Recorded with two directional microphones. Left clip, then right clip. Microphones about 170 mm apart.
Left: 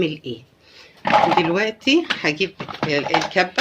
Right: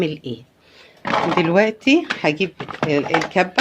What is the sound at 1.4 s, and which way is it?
Speech, 60° right (ahead or behind).